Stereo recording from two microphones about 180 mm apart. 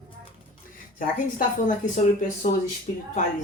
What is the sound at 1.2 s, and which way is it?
A woman's voice, 50° left (ahead or behind).